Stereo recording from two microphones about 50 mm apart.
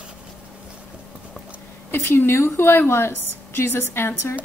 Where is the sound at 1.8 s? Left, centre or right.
Left.